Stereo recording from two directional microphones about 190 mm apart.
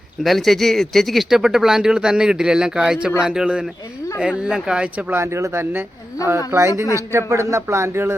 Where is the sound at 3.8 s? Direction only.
15° left (ahead or behind).